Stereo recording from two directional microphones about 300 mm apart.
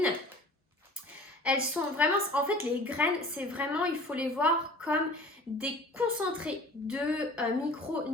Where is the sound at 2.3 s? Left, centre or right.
Centre.